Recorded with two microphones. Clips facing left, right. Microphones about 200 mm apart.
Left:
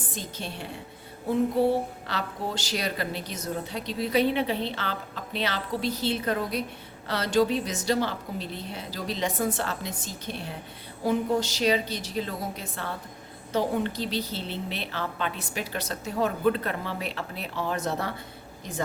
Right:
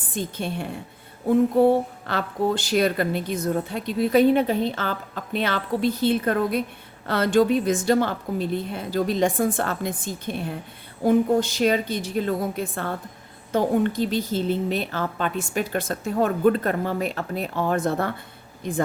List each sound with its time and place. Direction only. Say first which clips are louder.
0.1 s a woman's voice: right 11 dB; 55° right (ahead or behind)